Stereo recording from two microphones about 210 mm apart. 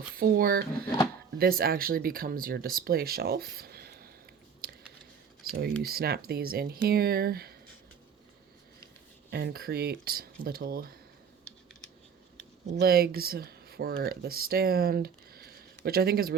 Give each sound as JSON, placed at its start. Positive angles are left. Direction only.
{"t": 0.1, "sound": "speech", "side_deg": -45}
{"t": 5.4, "sound": "a sound", "side_deg": -45}
{"t": 5.8, "sound": "speech", "side_deg": -45}
{"t": 9.3, "sound": "speech", "side_deg": -50}
{"t": 12.8, "sound": "speech", "side_deg": -45}